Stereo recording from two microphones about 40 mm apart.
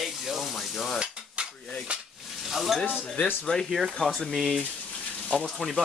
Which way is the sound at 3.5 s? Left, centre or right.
Left.